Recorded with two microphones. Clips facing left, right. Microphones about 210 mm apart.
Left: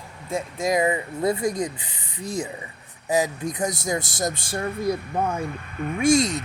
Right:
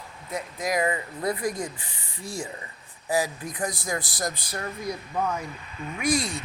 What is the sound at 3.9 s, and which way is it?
Speech, 25° left (ahead or behind).